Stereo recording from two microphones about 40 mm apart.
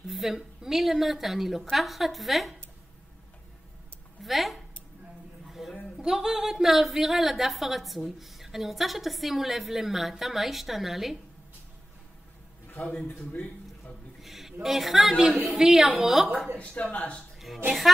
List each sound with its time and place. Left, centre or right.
0.0 s a sound: centre
0.6 s a woman's voice: centre
4.2 s a woman's voice: centre
5.5 s a sound: centre
5.9 s a woman's voice: centre
12.8 s speech: left
14.2 s a woman's voice: centre
16.5 s speech: left